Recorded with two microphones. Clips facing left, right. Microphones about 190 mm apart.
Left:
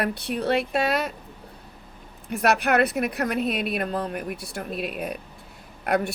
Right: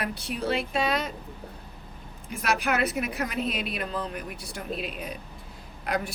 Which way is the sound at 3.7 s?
50° left (ahead or behind).